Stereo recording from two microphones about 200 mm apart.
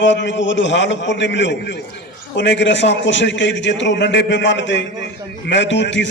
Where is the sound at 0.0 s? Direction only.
65° left (ahead or behind).